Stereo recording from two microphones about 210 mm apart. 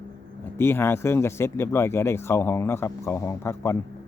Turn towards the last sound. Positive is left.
turn(degrees=15)  # may be behind; listen again after turning